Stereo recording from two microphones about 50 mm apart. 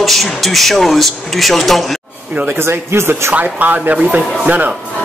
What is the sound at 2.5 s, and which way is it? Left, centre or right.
Speech, right.